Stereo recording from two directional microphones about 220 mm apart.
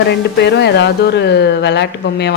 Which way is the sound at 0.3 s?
50° left (ahead or behind).